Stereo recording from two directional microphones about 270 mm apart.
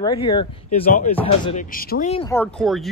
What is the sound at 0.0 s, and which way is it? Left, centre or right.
Speech, centre.